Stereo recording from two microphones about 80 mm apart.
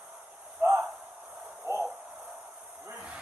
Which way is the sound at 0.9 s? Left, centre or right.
Centre.